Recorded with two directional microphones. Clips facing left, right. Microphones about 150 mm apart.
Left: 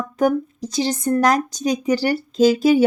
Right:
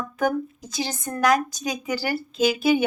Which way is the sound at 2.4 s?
35° left (ahead or behind).